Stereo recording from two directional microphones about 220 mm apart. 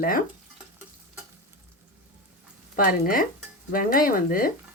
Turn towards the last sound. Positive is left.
turn(degrees=40)  # may be behind; listen again after turning